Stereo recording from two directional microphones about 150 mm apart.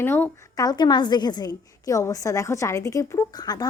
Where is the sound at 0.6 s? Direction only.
30° left (ahead or behind).